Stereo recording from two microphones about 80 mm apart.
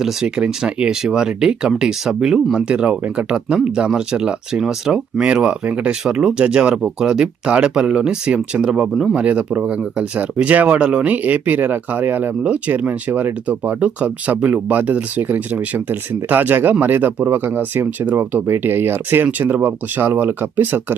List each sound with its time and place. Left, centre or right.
0.0 s speech: centre; by 20.8 s right